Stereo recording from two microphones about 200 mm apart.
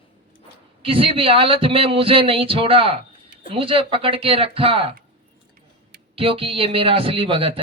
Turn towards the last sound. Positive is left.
turn(degrees=-25)  # may be behind; listen again after turning